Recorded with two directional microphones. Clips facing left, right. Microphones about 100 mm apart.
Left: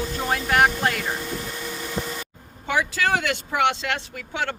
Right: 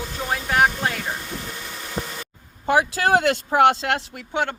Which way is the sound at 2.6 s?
40° right (ahead or behind).